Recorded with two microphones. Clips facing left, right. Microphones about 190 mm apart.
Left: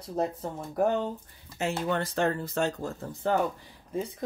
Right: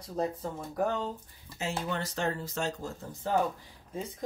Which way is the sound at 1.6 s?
55° left (ahead or behind).